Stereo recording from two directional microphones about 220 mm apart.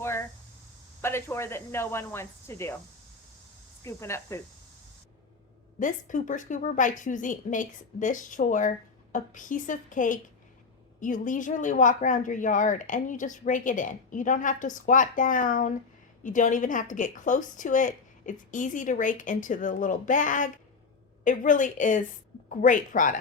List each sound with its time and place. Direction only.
0.0 s a sound: 10° left (ahead or behind)
1.0 s speech: 10° left (ahead or behind)
3.8 s speech: 15° left (ahead or behind)
5.8 s a woman's voice: 35° left (ahead or behind)